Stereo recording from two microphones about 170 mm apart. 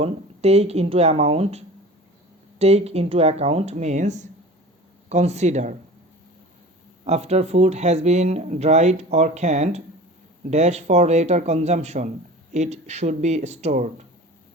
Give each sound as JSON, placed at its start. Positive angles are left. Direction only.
{"t": 0.0, "sound": "speech", "side_deg": -40}
{"t": 7.0, "sound": "speech", "side_deg": -40}